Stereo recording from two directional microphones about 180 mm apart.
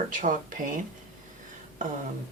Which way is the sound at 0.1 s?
45° right (ahead or behind).